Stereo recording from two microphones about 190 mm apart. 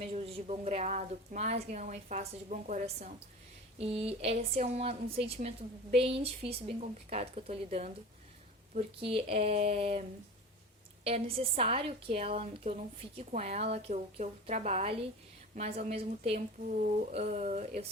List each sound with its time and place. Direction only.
0.0 s speech: 30° right (ahead or behind)
11.0 s speech: 30° right (ahead or behind)